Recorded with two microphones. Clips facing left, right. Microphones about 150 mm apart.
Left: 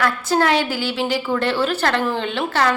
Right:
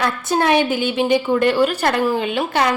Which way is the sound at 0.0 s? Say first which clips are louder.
Even; 20° right (ahead or behind).